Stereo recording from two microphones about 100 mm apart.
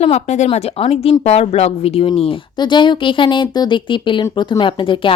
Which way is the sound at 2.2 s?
70° left (ahead or behind).